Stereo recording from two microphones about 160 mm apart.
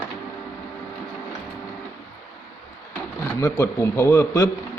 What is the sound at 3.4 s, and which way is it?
A man's voice, 20° left (ahead or behind).